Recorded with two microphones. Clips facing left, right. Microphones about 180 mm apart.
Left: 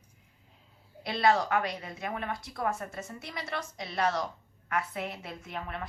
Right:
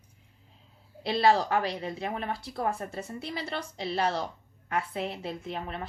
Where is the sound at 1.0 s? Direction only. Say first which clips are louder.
Right 2 dB; 30° right (ahead or behind).